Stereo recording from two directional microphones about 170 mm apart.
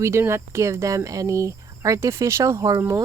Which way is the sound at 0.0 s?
15° right (ahead or behind).